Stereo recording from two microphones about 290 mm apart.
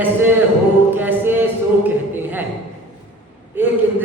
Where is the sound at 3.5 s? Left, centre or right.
Centre.